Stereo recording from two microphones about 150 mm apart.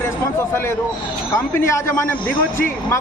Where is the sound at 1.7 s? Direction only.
20° left (ahead or behind).